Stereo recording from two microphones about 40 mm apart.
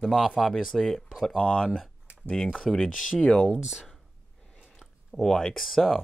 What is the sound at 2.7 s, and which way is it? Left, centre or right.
Speech, centre.